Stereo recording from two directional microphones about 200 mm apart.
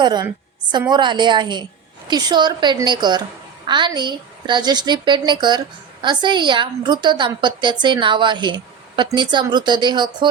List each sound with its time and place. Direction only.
0.0 s a woman's voice: 20° right (ahead or behind)